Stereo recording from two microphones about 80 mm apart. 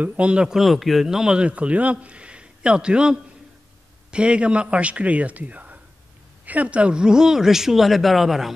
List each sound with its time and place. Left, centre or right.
0.0 s speech: centre